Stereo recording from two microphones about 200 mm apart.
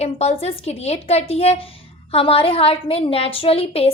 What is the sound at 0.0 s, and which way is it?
A woman's voice, 30° left (ahead or behind).